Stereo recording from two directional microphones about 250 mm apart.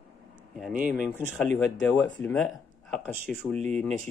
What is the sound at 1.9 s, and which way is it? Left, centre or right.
Speech, centre.